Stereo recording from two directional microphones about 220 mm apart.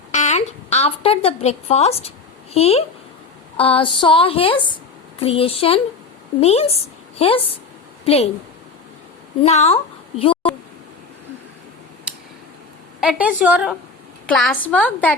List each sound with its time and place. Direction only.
0.1 s speech: 30° left (ahead or behind)
3.6 s a sound: 25° left (ahead or behind)
6.4 s a woman's voice: 30° left (ahead or behind)
9.4 s a woman's voice: 30° left (ahead or behind)
13.0 s a woman's voice: 5° right (ahead or behind)